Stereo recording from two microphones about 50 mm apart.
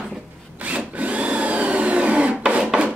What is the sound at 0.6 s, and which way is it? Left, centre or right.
Tools, right.